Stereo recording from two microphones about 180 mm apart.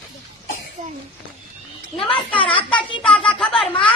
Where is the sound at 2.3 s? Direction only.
30° left (ahead or behind).